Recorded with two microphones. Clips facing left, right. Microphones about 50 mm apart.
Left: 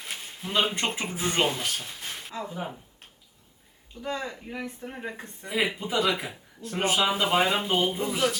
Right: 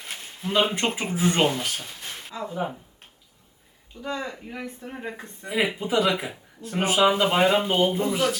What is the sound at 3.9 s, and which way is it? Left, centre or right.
Speech, right.